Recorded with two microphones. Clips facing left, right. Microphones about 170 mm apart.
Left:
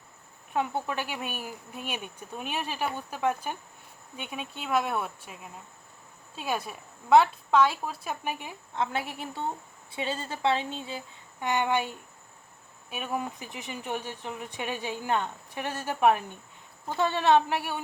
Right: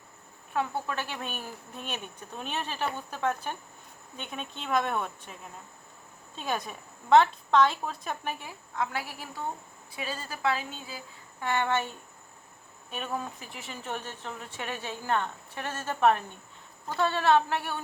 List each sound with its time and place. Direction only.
0.5 s speech: 20° left (ahead or behind)